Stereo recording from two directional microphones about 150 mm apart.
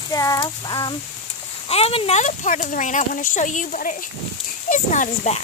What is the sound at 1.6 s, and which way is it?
Speech, 40° left (ahead or behind).